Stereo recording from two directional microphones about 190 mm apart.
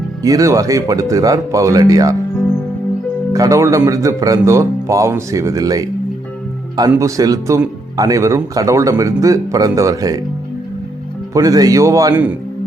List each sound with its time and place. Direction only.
0.2 s a man's voice: 15° right (ahead or behind)
3.3 s a man's voice: 15° right (ahead or behind)
6.9 s a man's voice: 20° right (ahead or behind)
11.3 s a man's voice: 20° right (ahead or behind)